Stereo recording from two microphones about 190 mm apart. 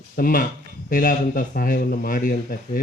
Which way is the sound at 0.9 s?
45° left (ahead or behind).